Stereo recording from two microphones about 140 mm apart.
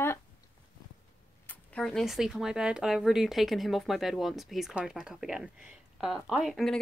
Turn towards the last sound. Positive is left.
turn(degrees=0)  # may be behind; listen again after turning